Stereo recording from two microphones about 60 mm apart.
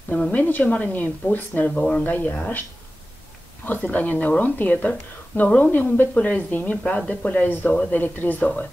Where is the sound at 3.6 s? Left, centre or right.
Left.